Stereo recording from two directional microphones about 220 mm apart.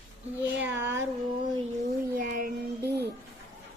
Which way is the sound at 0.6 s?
10° right (ahead or behind).